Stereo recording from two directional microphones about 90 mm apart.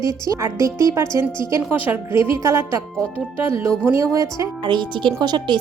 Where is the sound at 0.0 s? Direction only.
35° right (ahead or behind).